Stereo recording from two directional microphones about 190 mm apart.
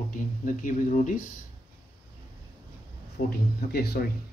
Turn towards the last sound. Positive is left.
turn(degrees=55)  # may be behind; listen again after turning